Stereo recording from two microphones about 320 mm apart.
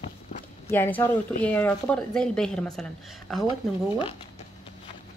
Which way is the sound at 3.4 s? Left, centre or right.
Centre.